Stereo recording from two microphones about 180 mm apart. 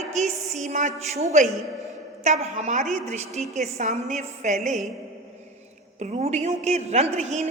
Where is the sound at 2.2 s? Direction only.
40° right (ahead or behind).